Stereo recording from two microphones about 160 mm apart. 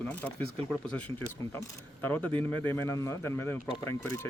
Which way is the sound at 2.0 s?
10° left (ahead or behind).